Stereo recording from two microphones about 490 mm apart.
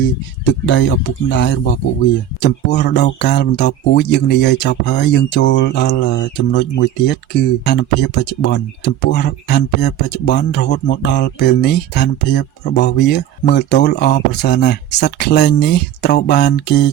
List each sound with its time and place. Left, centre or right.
0.4 s speech: left